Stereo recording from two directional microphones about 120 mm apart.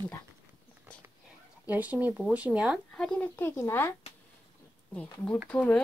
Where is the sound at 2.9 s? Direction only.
10° left (ahead or behind).